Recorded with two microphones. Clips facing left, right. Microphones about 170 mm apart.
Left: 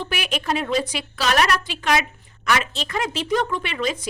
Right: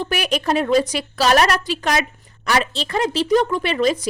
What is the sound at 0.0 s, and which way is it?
A woman's voice, 45° right (ahead or behind).